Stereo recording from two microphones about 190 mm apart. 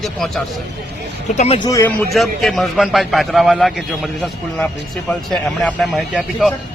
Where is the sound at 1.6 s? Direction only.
15° left (ahead or behind).